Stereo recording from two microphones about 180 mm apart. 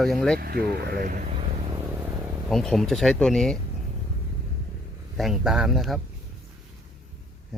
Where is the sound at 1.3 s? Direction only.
35° right (ahead or behind).